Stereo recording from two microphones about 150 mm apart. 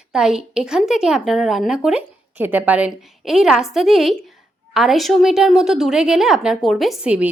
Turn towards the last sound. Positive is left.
turn(degrees=-10)  # may be behind; listen again after turning